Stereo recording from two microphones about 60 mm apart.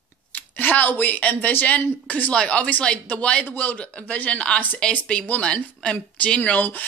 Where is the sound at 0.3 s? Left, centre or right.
Left.